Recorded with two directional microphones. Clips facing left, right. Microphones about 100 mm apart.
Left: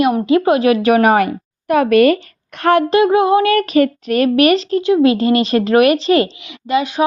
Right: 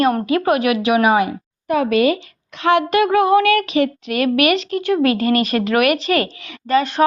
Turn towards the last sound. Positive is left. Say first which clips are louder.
# even
turn(degrees=10)  # may be behind; listen again after turning